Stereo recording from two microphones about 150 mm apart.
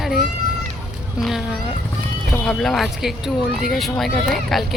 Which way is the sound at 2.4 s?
5° left (ahead or behind).